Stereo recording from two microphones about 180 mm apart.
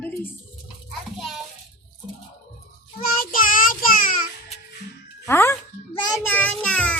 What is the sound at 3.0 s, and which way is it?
Child singing, 50° left (ahead or behind).